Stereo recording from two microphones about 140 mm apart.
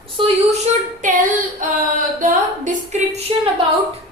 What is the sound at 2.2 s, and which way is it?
A woman's voice, 70° right (ahead or behind).